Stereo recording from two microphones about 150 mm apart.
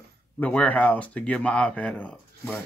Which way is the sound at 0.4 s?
10° left (ahead or behind).